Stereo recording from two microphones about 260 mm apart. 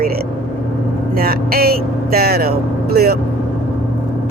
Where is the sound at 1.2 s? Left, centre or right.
Right.